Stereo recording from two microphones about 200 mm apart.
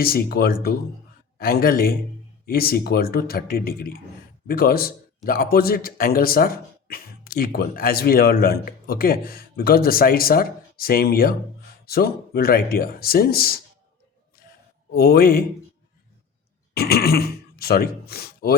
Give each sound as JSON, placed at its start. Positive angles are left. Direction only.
{"t": 0.0, "sound": "a man's voice", "side_deg": 50}
{"t": 14.9, "sound": "a man's voice", "side_deg": 50}
{"t": 16.7, "sound": "throat clearing", "side_deg": 50}